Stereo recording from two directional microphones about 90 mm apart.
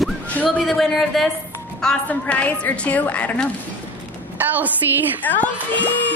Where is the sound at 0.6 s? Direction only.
Centre (ahead or behind).